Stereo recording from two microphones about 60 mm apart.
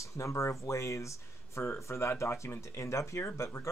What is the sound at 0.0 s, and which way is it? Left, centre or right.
Speech, left.